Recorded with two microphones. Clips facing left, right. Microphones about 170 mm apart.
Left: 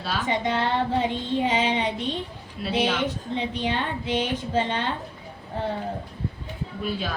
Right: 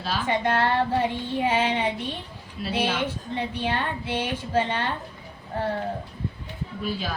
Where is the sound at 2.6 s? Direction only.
Centre (ahead or behind).